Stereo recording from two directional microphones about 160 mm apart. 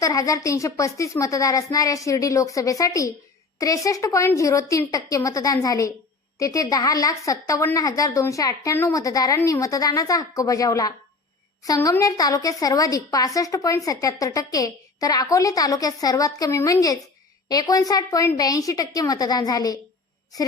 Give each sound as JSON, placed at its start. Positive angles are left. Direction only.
{"t": 0.0, "sound": "a woman's voice", "side_deg": 20}